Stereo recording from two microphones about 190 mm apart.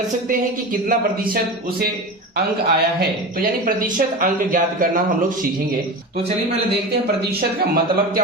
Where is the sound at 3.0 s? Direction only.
50° right (ahead or behind).